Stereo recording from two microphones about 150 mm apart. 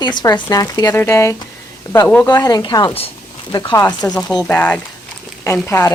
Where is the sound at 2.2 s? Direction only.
25° left (ahead or behind).